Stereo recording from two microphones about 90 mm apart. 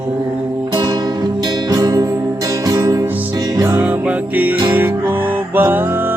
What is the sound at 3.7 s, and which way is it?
Music, 15° right (ahead or behind).